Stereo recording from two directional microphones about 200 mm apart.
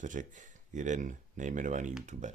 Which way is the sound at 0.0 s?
40° right (ahead or behind).